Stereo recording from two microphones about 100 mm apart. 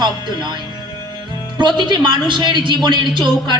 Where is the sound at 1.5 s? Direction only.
50° right (ahead or behind).